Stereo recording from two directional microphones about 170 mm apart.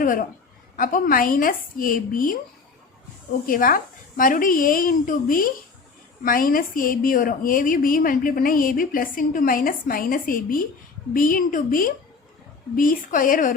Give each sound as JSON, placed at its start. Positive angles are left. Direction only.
{"t": 0.0, "sound": "a woman's voice", "side_deg": 55}
{"t": 3.4, "sound": "a woman's voice", "side_deg": 55}